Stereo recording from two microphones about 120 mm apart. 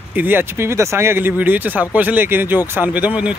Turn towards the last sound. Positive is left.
turn(degrees=-15)  # may be behind; listen again after turning